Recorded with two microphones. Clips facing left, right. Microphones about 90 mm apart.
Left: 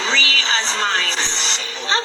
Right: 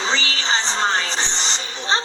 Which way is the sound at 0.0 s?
30° right (ahead or behind).